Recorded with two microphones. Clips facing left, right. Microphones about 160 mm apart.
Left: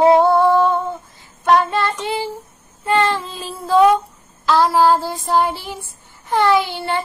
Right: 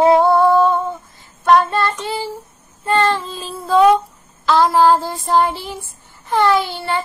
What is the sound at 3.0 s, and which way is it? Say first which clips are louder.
Child singing: right 2 dB; 45° right (ahead or behind).